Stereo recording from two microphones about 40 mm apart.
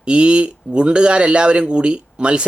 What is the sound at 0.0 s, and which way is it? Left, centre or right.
Speech, right.